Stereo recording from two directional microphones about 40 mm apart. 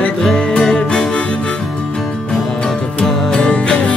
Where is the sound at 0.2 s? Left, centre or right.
Centre.